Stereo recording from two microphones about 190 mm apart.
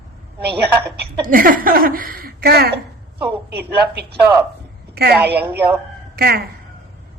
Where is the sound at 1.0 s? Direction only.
50° right (ahead or behind).